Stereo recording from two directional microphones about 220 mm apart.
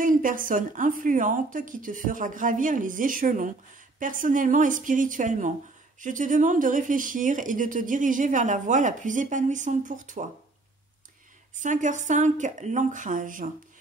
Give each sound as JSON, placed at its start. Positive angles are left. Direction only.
{"t": 0.0, "sound": "speech", "side_deg": -40}
{"t": 11.6, "sound": "speech", "side_deg": -35}